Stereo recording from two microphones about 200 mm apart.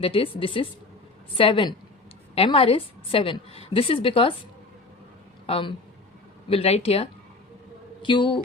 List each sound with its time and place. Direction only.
0.0 s a woman's voice: 25° left (ahead or behind)
5.5 s a woman's voice: 25° left (ahead or behind)